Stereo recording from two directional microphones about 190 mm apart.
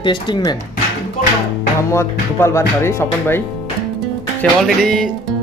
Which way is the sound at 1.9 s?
15° left (ahead or behind).